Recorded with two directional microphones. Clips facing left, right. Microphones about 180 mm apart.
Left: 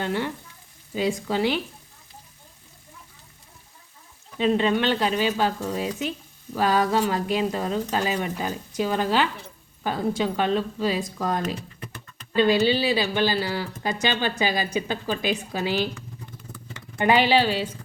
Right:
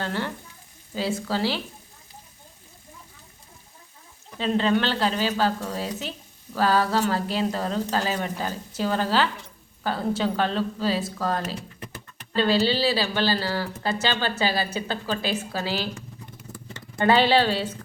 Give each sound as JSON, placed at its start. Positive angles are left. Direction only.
{"t": 0.0, "sound": "frying", "side_deg": 15}
{"t": 0.9, "sound": "speech", "side_deg": 15}
{"t": 4.4, "sound": "speech", "side_deg": 15}
{"t": 17.0, "sound": "speech", "side_deg": 15}